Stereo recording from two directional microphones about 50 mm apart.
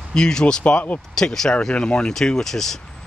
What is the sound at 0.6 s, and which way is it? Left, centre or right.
Speech, left.